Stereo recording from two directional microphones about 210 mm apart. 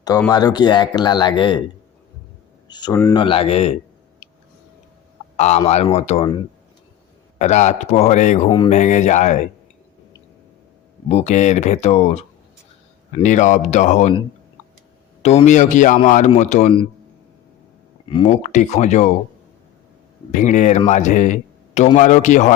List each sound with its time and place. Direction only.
0.3 s speech: 20° left (ahead or behind)
2.6 s speech: 20° left (ahead or behind)
5.4 s speech: 30° left (ahead or behind)
8.4 s speech: 20° left (ahead or behind)
8.7 s speech: 35° left (ahead or behind)
11.1 s speech: 35° left (ahead or behind)
15.2 s speech: 30° left (ahead or behind)
18.1 s speech: 20° left (ahead or behind)
18.4 s speech: 35° left (ahead or behind)
20.3 s speech: 35° left (ahead or behind)